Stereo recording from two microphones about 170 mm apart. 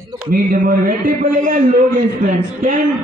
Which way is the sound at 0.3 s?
55° right (ahead or behind).